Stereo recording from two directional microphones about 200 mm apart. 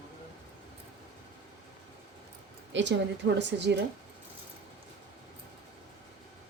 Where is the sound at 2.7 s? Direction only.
65° right (ahead or behind).